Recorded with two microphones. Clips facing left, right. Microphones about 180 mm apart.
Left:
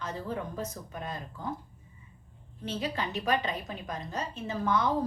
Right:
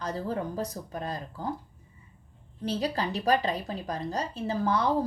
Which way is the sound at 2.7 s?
35° right (ahead or behind).